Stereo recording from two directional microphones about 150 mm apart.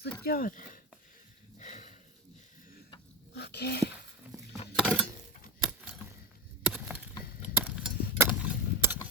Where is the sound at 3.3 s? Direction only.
90° left.